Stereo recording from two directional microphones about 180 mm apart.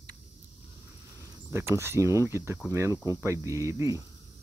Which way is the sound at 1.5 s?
15° right (ahead or behind).